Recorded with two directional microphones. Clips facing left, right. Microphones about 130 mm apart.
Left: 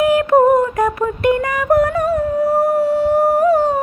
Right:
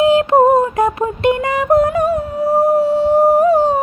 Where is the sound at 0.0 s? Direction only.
25° right (ahead or behind).